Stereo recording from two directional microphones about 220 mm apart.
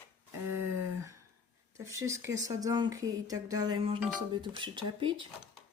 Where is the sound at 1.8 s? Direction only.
15° right (ahead or behind).